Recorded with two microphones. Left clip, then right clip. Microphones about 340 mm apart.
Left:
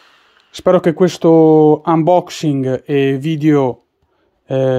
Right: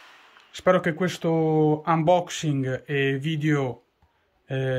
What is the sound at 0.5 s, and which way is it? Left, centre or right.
Speech, centre.